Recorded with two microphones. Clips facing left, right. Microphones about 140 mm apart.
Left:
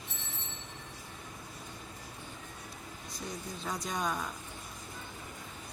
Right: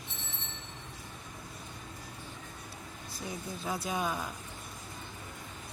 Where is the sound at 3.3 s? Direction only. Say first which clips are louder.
Right 2 dB; 5° right (ahead or behind).